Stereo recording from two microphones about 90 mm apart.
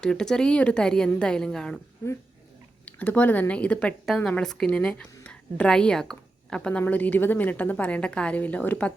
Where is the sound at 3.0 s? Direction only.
20° left (ahead or behind).